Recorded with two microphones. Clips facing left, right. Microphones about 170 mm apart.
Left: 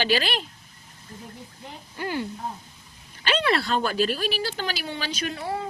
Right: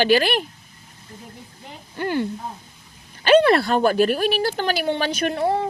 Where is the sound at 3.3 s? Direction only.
50° right (ahead or behind).